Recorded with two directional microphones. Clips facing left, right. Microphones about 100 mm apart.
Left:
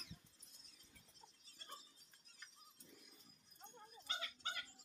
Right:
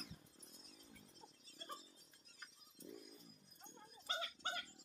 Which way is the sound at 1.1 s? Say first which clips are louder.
Right 6 dB; 40° right (ahead or behind).